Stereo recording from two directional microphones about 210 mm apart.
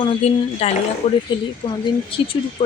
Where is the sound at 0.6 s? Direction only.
30° left (ahead or behind).